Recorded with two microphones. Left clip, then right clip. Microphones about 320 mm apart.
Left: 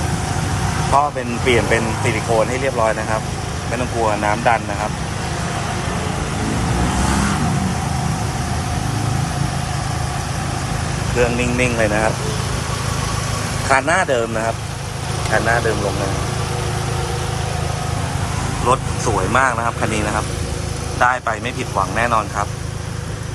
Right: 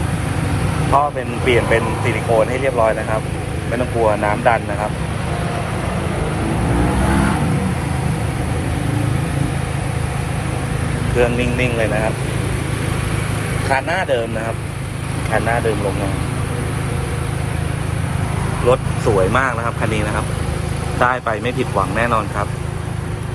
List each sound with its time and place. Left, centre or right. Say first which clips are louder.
0.9 s speech: right 1 dB; centre
11.2 s speech: even; centre
13.7 s speech: left 2 dB; centre
18.7 s speech: right 2 dB; centre
21.0 s speech: even; centre